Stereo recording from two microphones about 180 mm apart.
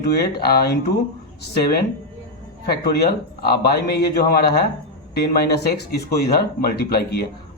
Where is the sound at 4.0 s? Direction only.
60° left (ahead or behind).